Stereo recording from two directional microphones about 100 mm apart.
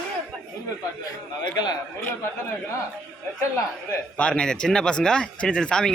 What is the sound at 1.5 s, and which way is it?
Speech, 45° left (ahead or behind).